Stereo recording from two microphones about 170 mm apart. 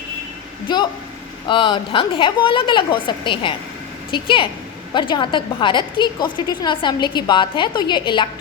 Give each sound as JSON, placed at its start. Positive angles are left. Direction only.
{"t": 0.7, "sound": "a woman's voice", "side_deg": 25}